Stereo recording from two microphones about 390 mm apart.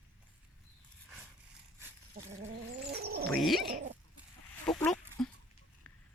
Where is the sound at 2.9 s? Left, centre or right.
Right.